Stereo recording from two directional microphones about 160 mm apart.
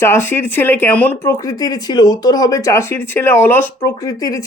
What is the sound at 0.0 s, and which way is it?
Speech, 15° left (ahead or behind).